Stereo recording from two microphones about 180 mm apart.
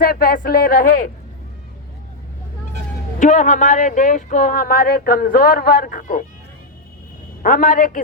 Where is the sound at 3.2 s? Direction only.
45° left (ahead or behind).